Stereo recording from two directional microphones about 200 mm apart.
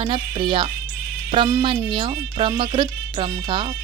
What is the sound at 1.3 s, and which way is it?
Speech, 20° right (ahead or behind).